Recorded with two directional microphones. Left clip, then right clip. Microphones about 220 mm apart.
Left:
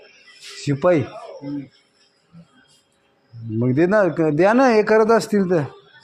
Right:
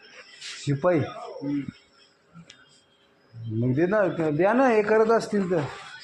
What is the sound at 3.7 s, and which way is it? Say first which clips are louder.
A man's voice: left 6 dB; 60° left (ahead or behind).